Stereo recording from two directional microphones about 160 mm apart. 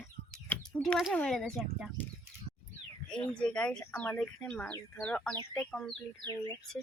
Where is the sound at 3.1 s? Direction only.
5° left (ahead or behind).